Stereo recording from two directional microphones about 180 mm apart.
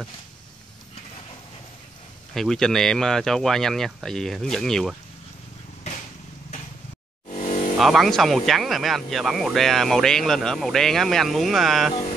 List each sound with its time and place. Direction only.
2.3 s speech: centre (ahead or behind)
7.2 s a sound: 40° left (ahead or behind)
7.7 s speech: centre (ahead or behind)